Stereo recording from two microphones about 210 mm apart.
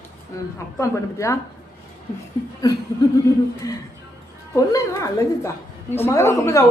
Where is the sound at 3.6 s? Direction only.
15° left (ahead or behind).